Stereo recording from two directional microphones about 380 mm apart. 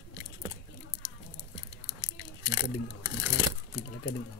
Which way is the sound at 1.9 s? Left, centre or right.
Left.